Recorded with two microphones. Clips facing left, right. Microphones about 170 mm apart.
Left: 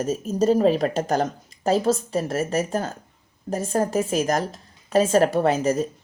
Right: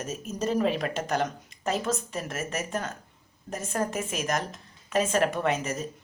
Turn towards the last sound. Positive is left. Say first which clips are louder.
# left 8 dB
turn(degrees=35)  # may be behind; listen again after turning